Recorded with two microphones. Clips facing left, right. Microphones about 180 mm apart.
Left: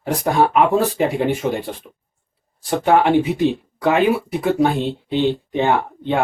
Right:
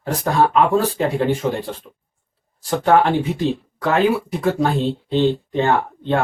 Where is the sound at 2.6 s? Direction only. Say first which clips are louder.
Even; 15° left (ahead or behind).